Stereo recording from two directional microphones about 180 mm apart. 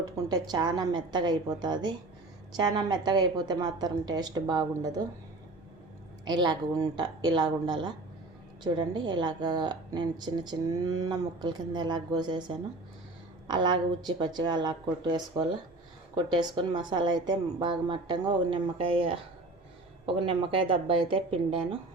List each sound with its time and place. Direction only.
0.0 s a woman's voice: 20° right (ahead or behind)
6.2 s a woman's voice: 25° right (ahead or behind)